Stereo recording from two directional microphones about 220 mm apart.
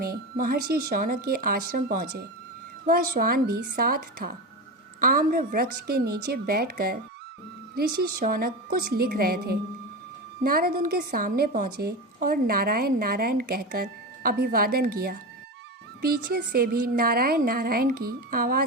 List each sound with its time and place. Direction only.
0.0 s a woman's voice: 40° right (ahead or behind)